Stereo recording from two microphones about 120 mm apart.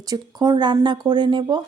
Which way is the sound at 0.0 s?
35° right (ahead or behind).